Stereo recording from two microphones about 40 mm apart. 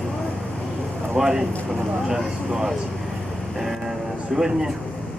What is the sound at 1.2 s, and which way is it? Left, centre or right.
Speech, centre.